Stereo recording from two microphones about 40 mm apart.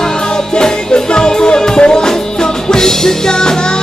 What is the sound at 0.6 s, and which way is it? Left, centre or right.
Music, centre.